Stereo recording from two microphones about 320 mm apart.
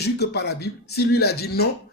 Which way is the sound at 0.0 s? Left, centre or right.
Left.